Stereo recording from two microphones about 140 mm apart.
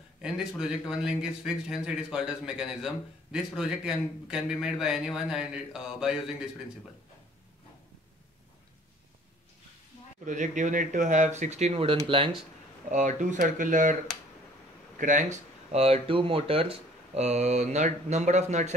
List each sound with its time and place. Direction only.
0.2 s speech: 5° right (ahead or behind)
10.2 s speech: 60° right (ahead or behind); by 12.0 s 40° right (ahead or behind)
12.9 s speech: 65° right (ahead or behind)
15.0 s speech: 65° right (ahead or behind)